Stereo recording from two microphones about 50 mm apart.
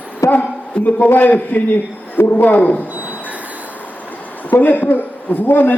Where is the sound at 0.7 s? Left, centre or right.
Left.